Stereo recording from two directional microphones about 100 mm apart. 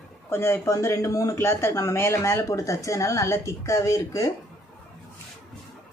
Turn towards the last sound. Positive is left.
turn(degrees=30)  # may be behind; listen again after turning